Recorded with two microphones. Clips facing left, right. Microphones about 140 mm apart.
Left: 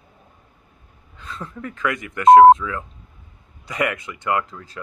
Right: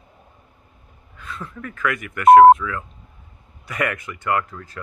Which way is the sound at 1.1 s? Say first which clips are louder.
Left 1 dB; 30° left (ahead or behind).